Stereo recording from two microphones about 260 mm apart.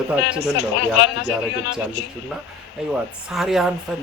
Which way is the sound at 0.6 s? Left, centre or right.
Left.